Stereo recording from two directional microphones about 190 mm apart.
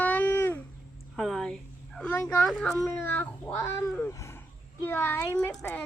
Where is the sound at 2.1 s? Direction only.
15° left (ahead or behind).